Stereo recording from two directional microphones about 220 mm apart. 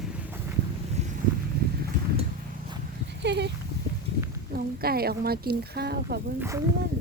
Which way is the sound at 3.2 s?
50° right (ahead or behind).